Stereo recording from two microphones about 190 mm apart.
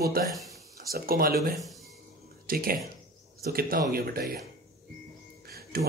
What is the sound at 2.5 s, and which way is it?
Speech, 50° right (ahead or behind).